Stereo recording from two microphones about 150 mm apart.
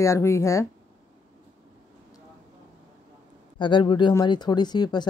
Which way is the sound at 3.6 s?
30° left (ahead or behind).